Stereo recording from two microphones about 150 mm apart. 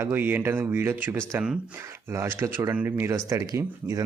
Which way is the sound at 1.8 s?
20° right (ahead or behind).